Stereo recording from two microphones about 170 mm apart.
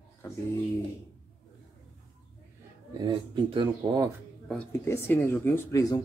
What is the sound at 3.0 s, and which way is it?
Speech, 30° right (ahead or behind).